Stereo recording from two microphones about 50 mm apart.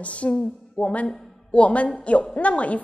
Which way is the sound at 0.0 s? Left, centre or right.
Left.